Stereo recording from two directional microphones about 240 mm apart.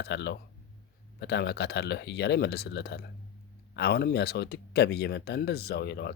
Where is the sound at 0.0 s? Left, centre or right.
Left.